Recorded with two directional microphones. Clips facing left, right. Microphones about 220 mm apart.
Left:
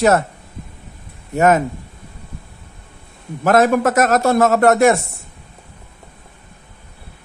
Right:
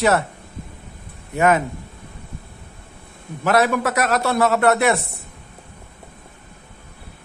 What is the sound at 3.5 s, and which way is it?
A man's voice, 45° left (ahead or behind).